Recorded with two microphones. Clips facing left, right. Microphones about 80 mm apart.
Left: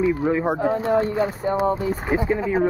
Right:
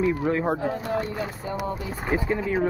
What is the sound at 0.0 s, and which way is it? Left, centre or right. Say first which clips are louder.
Speech: left 3 dB; left.